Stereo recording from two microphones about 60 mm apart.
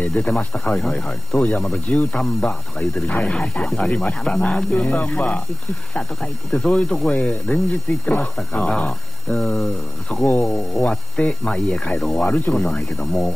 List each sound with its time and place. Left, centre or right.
0.0 s speech: left
12.3 s speech: left